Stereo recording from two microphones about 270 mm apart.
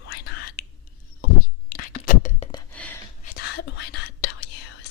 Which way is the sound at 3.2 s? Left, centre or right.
Left.